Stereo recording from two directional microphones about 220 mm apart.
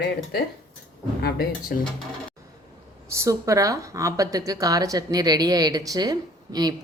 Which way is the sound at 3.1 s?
15° right (ahead or behind).